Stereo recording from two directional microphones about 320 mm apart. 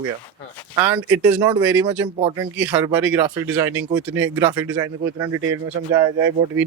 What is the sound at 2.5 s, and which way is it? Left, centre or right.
Speech, centre.